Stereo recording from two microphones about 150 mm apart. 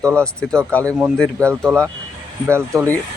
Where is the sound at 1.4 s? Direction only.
15° right (ahead or behind).